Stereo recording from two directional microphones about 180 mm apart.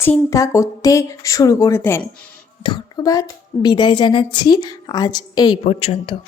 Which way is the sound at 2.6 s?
25° left (ahead or behind).